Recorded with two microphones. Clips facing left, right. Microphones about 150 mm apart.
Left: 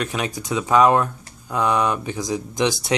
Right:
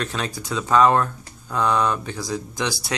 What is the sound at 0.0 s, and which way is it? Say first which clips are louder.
Speech: left 2 dB; 15° left (ahead or behind).